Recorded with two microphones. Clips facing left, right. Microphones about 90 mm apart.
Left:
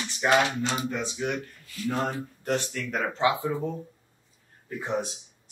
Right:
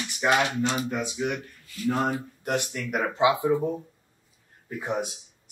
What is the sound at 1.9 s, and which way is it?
Speech, 15° right (ahead or behind).